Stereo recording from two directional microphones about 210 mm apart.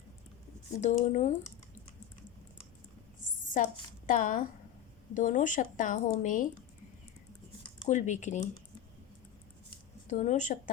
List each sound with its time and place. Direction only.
0.8 s speech: 35° left (ahead or behind)
3.5 s a woman's voice: 40° left (ahead or behind)
7.9 s speech: 35° left (ahead or behind)
10.1 s speech: 35° left (ahead or behind)